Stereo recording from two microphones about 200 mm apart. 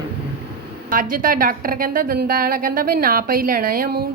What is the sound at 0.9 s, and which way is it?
A woman's voice, 45° right (ahead or behind).